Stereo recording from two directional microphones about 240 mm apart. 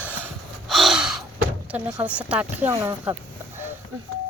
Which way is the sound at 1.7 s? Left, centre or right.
Centre.